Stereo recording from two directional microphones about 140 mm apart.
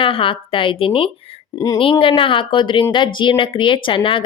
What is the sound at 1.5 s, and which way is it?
Speech, 25° left (ahead or behind).